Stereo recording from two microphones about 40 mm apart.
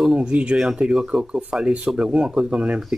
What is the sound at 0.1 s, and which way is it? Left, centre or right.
Speech, right.